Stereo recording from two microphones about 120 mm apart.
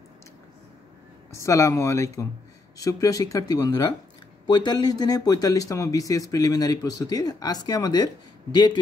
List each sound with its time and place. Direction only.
1.3 s speech: 25° left (ahead or behind)